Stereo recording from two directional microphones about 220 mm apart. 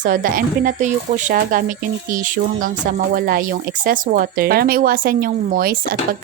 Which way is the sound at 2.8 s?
40° right (ahead or behind).